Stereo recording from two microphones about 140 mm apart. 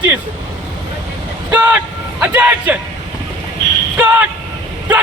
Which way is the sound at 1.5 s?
10° right (ahead or behind).